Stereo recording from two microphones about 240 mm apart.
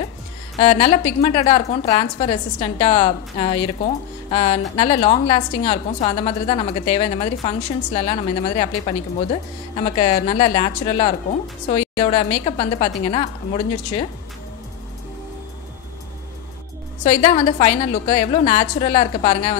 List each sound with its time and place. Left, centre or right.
0.6 s a woman's voice: left
17.0 s a woman's voice: left